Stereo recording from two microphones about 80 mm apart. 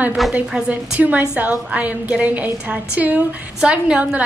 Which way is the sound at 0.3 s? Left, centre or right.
Centre.